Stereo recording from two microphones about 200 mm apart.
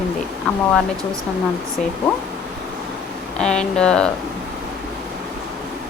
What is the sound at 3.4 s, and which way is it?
Speech, 5° left (ahead or behind).